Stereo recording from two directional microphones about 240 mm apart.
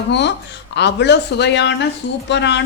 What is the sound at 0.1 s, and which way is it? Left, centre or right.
A woman's voice, left.